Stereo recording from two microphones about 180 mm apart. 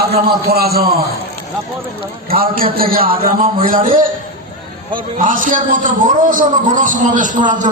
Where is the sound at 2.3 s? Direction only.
55° right (ahead or behind).